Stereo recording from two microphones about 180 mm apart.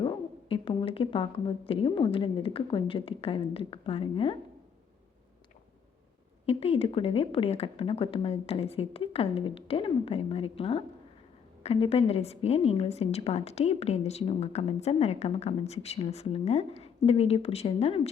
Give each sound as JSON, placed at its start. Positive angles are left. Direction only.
{"t": 0.0, "sound": "a woman's voice", "side_deg": 30}
{"t": 6.4, "sound": "a woman's voice", "side_deg": 35}